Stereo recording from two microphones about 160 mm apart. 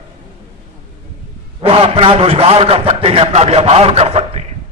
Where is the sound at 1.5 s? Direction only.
35° right (ahead or behind).